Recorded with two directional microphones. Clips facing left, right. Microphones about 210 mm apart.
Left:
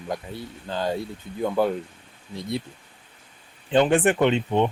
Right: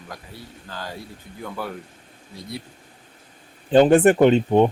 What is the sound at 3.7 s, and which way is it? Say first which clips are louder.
Speech: right 5 dB; 40° right (ahead or behind).